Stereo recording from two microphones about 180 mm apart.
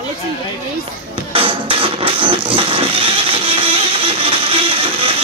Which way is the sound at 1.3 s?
30° right (ahead or behind).